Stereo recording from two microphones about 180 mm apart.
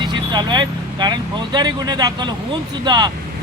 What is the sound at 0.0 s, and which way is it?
Speech, 25° right (ahead or behind).